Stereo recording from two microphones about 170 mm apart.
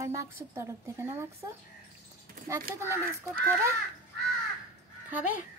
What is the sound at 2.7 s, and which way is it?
Speech, 15° right (ahead or behind).